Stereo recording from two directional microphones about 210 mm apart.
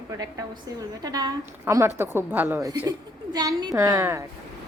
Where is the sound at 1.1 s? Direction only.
15° right (ahead or behind).